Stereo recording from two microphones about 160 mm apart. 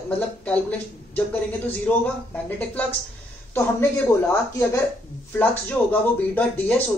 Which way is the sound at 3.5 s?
15° left (ahead or behind).